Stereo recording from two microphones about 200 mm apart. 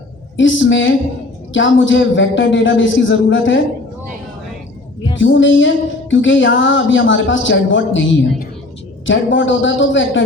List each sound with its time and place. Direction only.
0.3 s a woman's voice: 65° left (ahead or behind)
5.1 s speech: 70° left (ahead or behind)
9.0 s speech: 70° left (ahead or behind)